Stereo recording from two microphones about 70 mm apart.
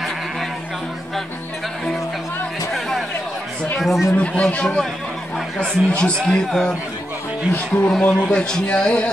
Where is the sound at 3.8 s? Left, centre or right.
Centre.